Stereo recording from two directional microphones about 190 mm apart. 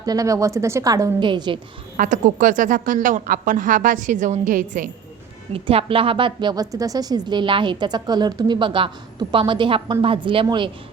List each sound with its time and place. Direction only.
0.0 s a woman's voice: 20° right (ahead or behind)
2.0 s a woman's voice: 45° right (ahead or behind)
5.5 s a woman's voice: 30° right (ahead or behind)